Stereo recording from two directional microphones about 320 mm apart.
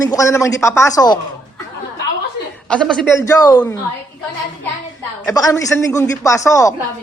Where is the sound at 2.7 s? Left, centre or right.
Centre.